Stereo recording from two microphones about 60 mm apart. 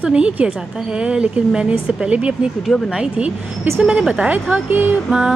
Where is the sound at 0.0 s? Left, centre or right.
Centre.